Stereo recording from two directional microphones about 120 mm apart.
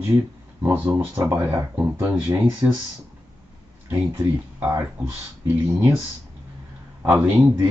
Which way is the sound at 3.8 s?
20° right (ahead or behind).